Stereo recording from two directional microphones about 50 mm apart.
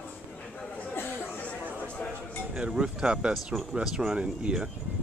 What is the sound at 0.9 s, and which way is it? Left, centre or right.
Chatter, left.